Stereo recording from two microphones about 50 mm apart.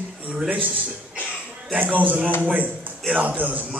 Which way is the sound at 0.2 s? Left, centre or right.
Right.